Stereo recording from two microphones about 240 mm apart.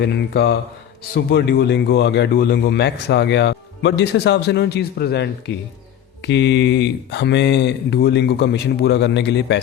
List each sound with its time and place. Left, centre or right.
0.0 s speech: left